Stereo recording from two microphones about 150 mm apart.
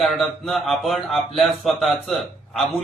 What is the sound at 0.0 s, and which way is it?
A man's voice, centre (ahead or behind).